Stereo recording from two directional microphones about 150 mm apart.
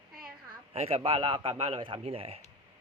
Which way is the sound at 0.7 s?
45° right (ahead or behind).